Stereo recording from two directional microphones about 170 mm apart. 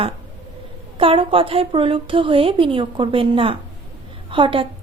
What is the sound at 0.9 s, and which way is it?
A woman's voice, 30° right (ahead or behind).